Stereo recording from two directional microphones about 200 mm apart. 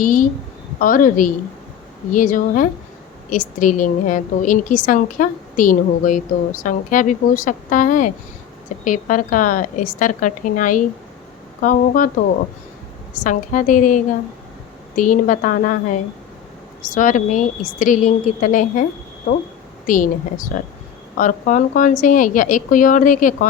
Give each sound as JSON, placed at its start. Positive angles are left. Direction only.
{"t": 0.0, "sound": "a woman's voice", "side_deg": 40}
{"t": 13.1, "sound": "a woman's voice", "side_deg": 40}
{"t": 19.9, "sound": "a woman's voice", "side_deg": 40}